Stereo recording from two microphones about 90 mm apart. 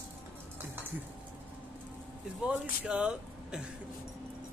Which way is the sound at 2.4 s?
15° right (ahead or behind).